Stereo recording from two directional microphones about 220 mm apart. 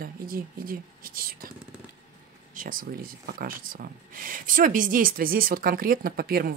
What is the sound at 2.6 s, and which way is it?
Speech, 40° right (ahead or behind).